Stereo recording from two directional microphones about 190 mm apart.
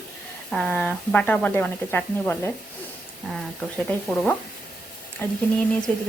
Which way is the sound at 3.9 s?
10° left (ahead or behind).